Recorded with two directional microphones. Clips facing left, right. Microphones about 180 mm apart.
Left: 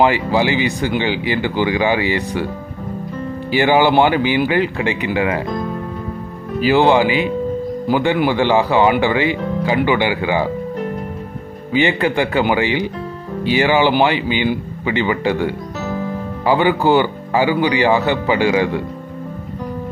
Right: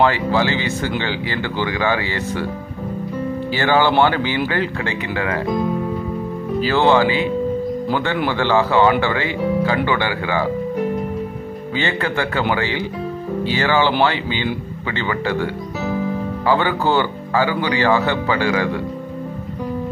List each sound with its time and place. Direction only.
0.0 s speech: 15° left (ahead or behind)
3.5 s speech: 15° left (ahead or behind)
6.6 s speech: 15° left (ahead or behind)
11.7 s speech: 15° left (ahead or behind)